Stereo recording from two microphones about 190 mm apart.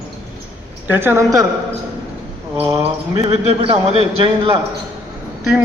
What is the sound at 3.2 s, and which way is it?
Speech, 30° right (ahead or behind).